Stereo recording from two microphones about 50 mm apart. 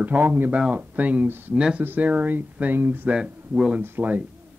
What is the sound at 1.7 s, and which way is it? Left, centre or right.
Speech, right.